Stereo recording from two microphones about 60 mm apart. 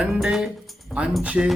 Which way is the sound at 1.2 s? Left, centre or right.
Centre.